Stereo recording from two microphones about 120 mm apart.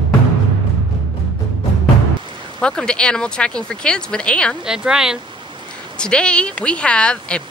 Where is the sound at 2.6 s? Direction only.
10° left (ahead or behind).